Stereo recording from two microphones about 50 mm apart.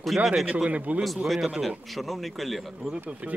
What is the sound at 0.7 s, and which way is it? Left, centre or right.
Speech, right.